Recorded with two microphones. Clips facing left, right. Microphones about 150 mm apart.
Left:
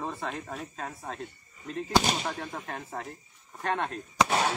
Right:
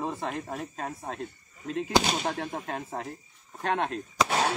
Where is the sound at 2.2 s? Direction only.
40° right (ahead or behind).